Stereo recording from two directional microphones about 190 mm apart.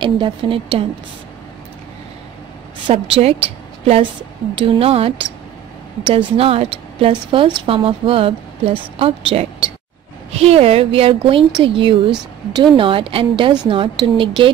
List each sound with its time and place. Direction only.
0.0 s a woman's voice: 25° right (ahead or behind)
2.9 s a woman's voice: 30° right (ahead or behind)